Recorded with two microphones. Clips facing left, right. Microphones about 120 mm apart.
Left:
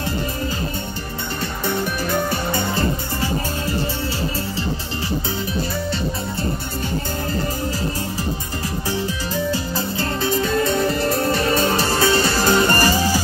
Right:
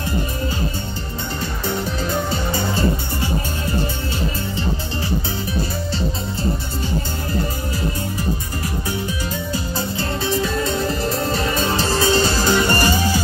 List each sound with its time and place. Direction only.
8.8 s music: 30° left (ahead or behind)
11.6 s music: 25° right (ahead or behind)
12.4 s music: 35° left (ahead or behind)